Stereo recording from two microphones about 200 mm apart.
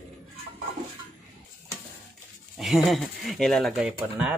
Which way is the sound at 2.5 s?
Centre (ahead or behind).